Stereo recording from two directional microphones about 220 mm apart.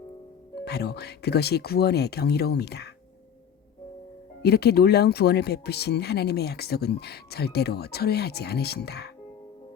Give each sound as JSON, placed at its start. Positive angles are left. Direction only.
{"t": 0.6, "sound": "speech", "side_deg": 50}
{"t": 4.4, "sound": "speech", "side_deg": 45}